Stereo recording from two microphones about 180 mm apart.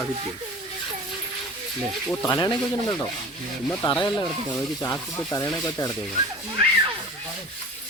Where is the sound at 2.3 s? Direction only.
25° left (ahead or behind).